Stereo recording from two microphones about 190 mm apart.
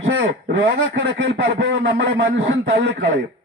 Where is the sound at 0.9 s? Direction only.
80° right.